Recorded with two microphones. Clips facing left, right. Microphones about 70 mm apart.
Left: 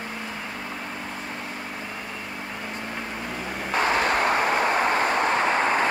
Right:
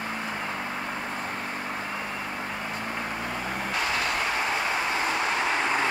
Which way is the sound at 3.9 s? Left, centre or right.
Left.